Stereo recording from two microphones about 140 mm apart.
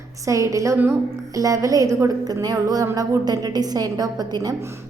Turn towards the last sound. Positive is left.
turn(degrees=-30)  # may be behind; listen again after turning